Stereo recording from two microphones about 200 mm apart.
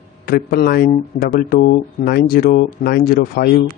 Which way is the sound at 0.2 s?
50° left (ahead or behind).